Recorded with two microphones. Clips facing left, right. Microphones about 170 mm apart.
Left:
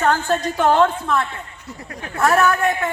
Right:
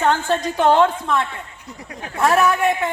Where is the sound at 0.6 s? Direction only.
15° right (ahead or behind).